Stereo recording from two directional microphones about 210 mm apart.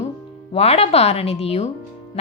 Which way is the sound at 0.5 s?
30° left (ahead or behind).